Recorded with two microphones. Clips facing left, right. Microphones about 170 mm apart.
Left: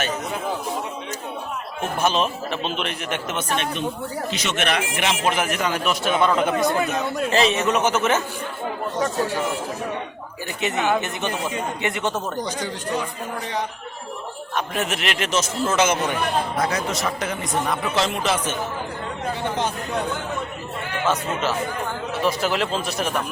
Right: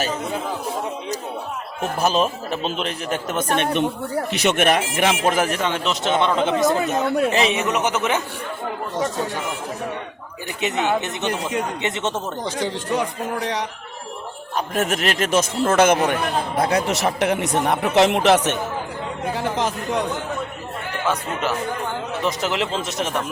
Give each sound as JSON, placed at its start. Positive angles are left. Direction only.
{"t": 2.0, "sound": "a man's voice", "side_deg": -40}
{"t": 3.5, "sound": "speech", "side_deg": -60}
{"t": 5.5, "sound": "a man's voice", "side_deg": -25}
{"t": 10.6, "sound": "a man's voice", "side_deg": -20}
{"t": 11.3, "sound": "speech", "side_deg": -75}
{"t": 11.8, "sound": "a man's voice", "side_deg": -20}
{"t": 12.5, "sound": "speech", "side_deg": -90}
{"t": 14.5, "sound": "speech", "side_deg": -45}
{"t": 16.7, "sound": "speech", "side_deg": -70}
{"t": 19.4, "sound": "speech", "side_deg": -90}
{"t": 22.2, "sound": "a man's voice", "side_deg": -20}